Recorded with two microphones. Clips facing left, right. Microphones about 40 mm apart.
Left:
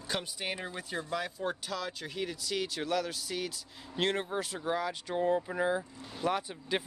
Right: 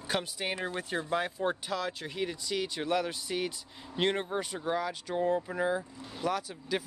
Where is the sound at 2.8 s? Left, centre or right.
Centre.